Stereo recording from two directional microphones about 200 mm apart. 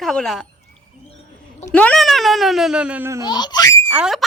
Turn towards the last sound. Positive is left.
turn(degrees=-5)  # may be behind; listen again after turning